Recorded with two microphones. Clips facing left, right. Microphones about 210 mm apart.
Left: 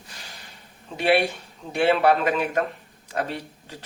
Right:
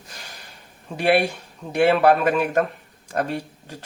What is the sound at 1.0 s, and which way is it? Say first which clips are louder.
Speech: right 2 dB; 45° right (ahead or behind).